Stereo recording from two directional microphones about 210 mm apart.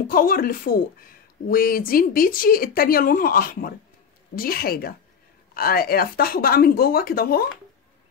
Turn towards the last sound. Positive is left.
turn(degrees=45)  # may be behind; listen again after turning